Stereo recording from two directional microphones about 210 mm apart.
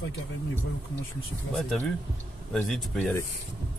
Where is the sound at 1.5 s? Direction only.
Centre (ahead or behind).